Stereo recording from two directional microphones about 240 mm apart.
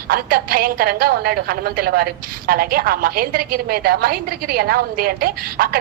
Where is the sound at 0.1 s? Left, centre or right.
Right.